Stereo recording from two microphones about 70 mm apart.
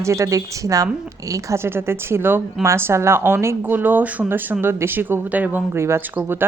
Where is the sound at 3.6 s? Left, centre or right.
Right.